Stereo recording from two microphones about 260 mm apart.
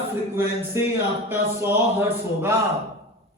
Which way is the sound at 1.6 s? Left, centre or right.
Centre.